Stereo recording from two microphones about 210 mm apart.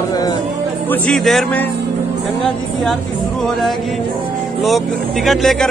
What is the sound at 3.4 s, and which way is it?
Speech, centre (ahead or behind).